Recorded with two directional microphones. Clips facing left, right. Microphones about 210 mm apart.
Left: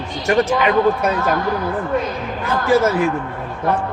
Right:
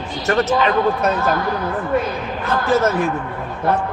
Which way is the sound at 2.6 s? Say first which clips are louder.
Left 2 dB; 10° left (ahead or behind).